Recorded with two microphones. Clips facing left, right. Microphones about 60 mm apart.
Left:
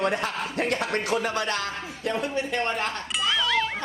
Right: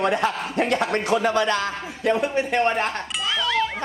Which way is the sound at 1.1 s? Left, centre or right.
Right.